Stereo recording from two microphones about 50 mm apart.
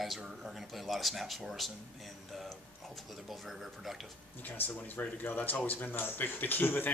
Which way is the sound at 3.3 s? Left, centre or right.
Centre.